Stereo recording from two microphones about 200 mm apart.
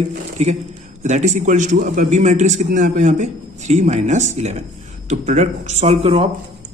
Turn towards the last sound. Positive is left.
turn(degrees=-30)  # may be behind; listen again after turning